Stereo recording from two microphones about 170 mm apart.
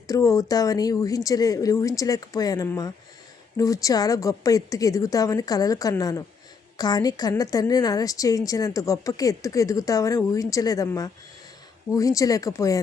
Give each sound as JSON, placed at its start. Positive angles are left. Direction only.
{"t": 0.1, "sound": "a woman's voice", "side_deg": 20}